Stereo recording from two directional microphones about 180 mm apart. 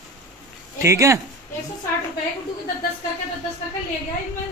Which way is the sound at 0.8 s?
15° right (ahead or behind).